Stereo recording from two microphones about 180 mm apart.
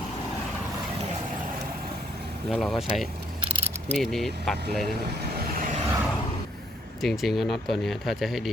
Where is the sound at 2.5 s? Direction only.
Centre (ahead or behind).